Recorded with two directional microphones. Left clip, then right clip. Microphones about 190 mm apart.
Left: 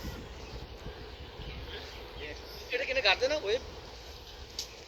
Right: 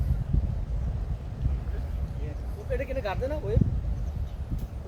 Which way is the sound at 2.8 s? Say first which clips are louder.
Left 8 dB; 40° right (ahead or behind).